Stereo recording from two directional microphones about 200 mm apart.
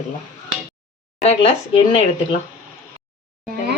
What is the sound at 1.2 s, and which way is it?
Speech, 30° left (ahead or behind).